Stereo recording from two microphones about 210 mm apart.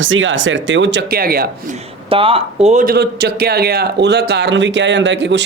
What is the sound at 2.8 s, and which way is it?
Speech, 50° right (ahead or behind).